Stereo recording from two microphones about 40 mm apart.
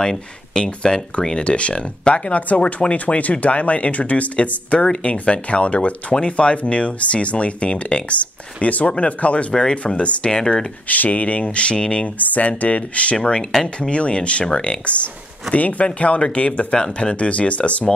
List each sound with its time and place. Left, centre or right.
0.0 s speech: centre
1.4 s speech: left
9.5 s speech: centre
10.3 s speech: centre
10.9 s speech: left
12.2 s speech: left
13.2 s speech: left